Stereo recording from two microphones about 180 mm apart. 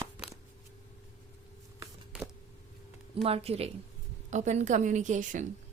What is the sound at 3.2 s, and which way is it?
A woman's voice, 35° right (ahead or behind).